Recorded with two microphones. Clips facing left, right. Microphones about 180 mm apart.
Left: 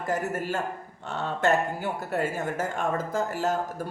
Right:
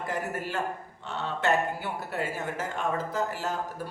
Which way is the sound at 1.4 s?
45° left (ahead or behind).